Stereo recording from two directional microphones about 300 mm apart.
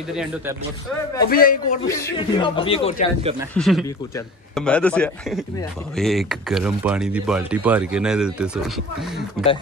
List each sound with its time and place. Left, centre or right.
0.1 s speech: centre
1.3 s a man's voice: left
1.9 s speech: centre
3.2 s speech: centre
3.5 s speech: centre